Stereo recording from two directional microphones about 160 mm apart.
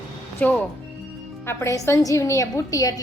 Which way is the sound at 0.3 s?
10° left (ahead or behind).